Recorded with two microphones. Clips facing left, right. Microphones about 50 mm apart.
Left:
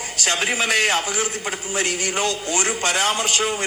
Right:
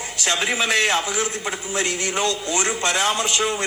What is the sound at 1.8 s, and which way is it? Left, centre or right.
A man's voice, left.